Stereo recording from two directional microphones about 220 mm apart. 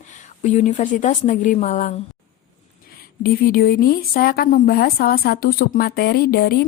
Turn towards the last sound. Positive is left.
turn(degrees=45)  # may be behind; listen again after turning